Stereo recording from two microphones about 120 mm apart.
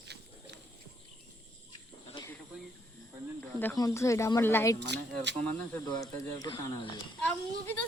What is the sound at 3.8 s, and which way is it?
A woman's voice, 25° left (ahead or behind).